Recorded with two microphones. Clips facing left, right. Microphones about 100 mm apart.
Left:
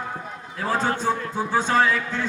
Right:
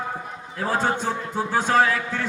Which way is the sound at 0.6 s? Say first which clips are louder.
Left 1 dB; 15° right (ahead or behind).